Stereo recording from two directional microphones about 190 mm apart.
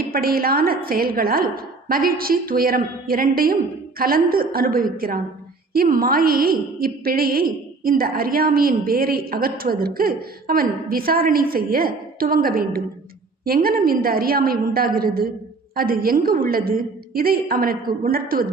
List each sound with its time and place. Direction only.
0.0 s a woman's voice: 50° right (ahead or behind)